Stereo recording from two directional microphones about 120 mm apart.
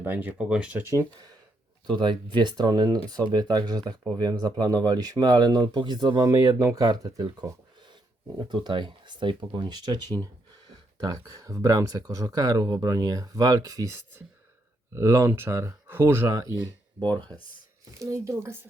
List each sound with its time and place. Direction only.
0.0 s speech: 15° right (ahead or behind)
1.9 s speech: 40° right (ahead or behind)
8.4 s speech: 40° right (ahead or behind)
18.0 s speech: 25° right (ahead or behind)